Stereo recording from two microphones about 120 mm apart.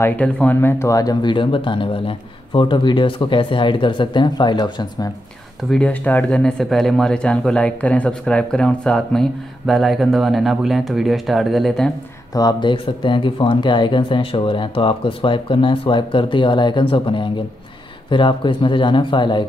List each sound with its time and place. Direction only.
0.0 s speech: 10° left (ahead or behind); by 5.1 s 35° left (ahead or behind)
5.7 s speech: 10° left (ahead or behind)
12.4 s speech: 40° left (ahead or behind)